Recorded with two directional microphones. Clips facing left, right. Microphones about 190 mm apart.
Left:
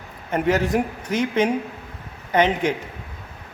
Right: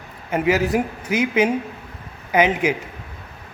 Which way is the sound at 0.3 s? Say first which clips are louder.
Right 1 dB; 5° right (ahead or behind).